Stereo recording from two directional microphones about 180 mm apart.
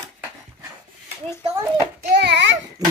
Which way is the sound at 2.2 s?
75° right (ahead or behind).